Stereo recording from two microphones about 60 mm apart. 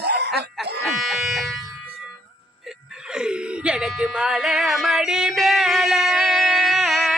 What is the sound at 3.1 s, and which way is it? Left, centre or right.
Whimper, centre.